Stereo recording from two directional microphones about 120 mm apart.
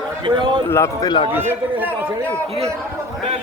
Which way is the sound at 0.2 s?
40° right (ahead or behind).